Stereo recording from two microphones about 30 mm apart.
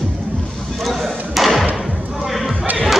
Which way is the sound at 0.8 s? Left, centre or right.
Centre.